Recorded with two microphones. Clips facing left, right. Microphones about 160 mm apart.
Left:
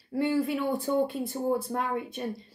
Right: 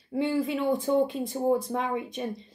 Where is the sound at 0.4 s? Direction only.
20° right (ahead or behind).